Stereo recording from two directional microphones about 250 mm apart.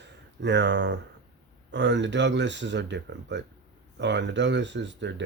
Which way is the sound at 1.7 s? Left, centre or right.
Right.